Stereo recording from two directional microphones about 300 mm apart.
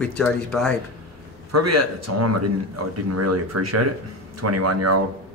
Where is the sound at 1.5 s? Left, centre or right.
Right.